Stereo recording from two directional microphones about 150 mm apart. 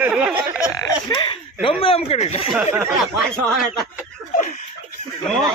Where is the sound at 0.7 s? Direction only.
25° left (ahead or behind).